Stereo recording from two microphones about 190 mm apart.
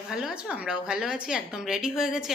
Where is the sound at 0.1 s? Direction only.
5° right (ahead or behind).